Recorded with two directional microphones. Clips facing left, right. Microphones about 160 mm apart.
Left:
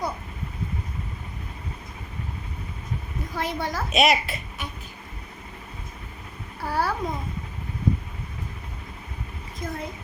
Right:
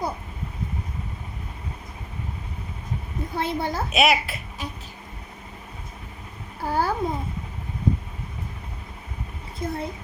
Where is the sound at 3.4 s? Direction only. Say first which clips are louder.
Right 2 dB; 30° right (ahead or behind).